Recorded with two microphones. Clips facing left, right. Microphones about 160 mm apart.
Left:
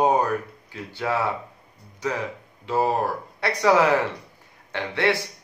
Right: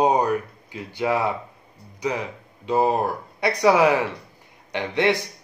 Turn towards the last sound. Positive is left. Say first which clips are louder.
# right 2 dB
turn(degrees=-15)  # may be behind; listen again after turning